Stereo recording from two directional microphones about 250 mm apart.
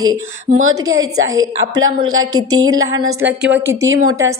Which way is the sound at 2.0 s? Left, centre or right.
Right.